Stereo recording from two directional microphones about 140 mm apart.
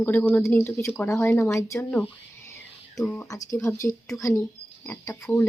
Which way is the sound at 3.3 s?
25° left (ahead or behind).